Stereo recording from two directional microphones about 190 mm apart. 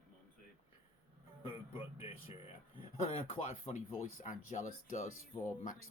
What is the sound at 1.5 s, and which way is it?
Speech, 30° left (ahead or behind).